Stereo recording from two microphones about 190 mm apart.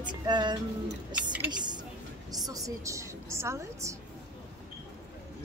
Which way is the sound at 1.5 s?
25° right (ahead or behind).